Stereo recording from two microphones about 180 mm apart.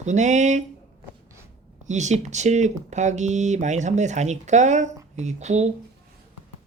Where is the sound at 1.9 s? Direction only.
40° right (ahead or behind).